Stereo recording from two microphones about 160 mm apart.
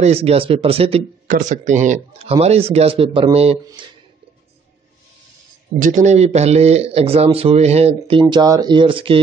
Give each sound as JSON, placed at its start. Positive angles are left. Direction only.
{"t": 0.0, "sound": "speech", "side_deg": -40}
{"t": 1.2, "sound": "speech", "side_deg": -55}
{"t": 5.8, "sound": "speech", "side_deg": -50}